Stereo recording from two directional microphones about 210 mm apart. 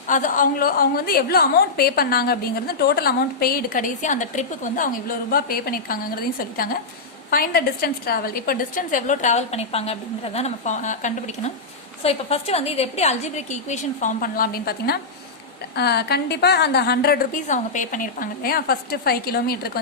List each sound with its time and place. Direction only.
0.1 s a woman's voice: 40° left (ahead or behind)
7.3 s a woman's voice: 45° left (ahead or behind)